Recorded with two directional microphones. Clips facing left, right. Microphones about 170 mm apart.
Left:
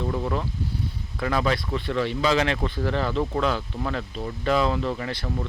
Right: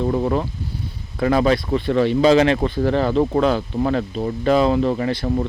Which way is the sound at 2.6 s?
50° right (ahead or behind).